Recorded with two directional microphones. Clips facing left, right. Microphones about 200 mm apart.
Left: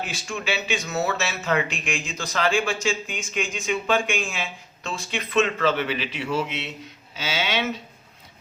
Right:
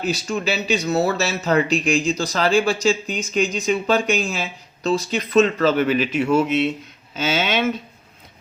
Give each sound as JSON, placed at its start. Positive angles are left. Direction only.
{"t": 0.0, "sound": "speech", "side_deg": -40}